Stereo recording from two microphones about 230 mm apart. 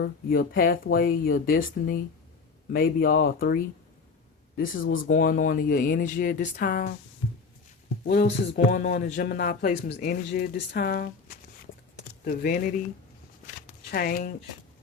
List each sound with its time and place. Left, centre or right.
0.0 s speech: left
8.0 s speech: left
13.9 s speech: left